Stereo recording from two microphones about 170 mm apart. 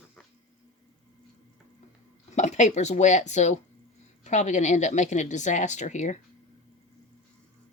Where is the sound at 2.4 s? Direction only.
45° left (ahead or behind).